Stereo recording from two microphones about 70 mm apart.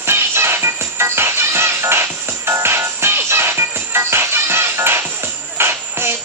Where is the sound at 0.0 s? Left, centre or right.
Right.